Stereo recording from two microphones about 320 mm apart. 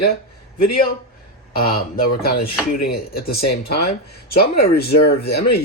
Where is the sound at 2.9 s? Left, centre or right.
Left.